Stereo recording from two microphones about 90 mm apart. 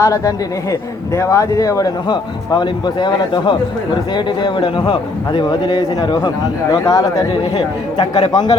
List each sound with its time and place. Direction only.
0.0 s a man's voice: 40° left (ahead or behind)
2.0 s a man's voice: 55° left (ahead or behind)